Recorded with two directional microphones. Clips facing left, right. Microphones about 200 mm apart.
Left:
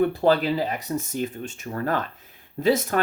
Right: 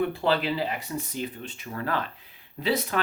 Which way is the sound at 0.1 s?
40° left (ahead or behind).